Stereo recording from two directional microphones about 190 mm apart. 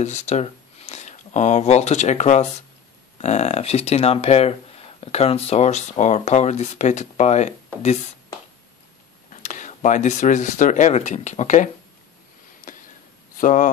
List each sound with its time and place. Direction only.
0.0 s speech: 35° left (ahead or behind)
9.3 s speech: 40° left (ahead or behind)
12.7 s a sound: 45° left (ahead or behind)
13.4 s speech: 45° left (ahead or behind)